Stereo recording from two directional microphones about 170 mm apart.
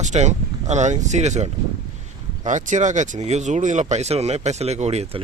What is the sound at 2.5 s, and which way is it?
Speech, 45° right (ahead or behind).